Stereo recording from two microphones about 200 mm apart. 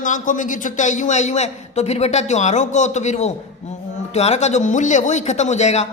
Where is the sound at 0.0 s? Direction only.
40° left (ahead or behind).